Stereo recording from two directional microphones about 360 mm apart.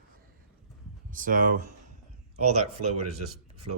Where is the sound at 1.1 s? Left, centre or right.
Right.